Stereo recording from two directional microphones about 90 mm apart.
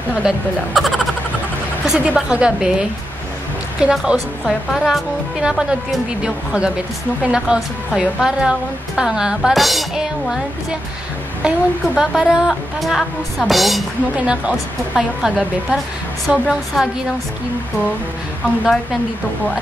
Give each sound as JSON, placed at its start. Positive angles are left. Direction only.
{"t": 0.8, "sound": "a woman's voice", "side_deg": 0}
{"t": 3.8, "sound": "a woman's voice", "side_deg": -5}
{"t": 14.1, "sound": "a woman's voice", "side_deg": -10}